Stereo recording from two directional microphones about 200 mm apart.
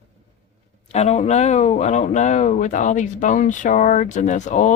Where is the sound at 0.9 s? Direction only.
35° left (ahead or behind).